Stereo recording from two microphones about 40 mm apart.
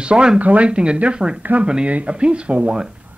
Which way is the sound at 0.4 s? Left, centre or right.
Right.